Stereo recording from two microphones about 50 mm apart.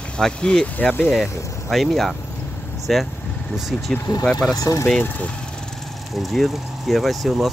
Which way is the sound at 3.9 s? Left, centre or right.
Centre.